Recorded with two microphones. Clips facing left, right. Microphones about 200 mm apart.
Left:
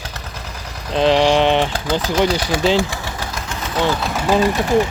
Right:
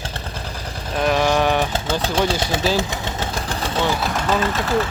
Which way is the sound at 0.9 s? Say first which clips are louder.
Left 4 dB; 25° left (ahead or behind).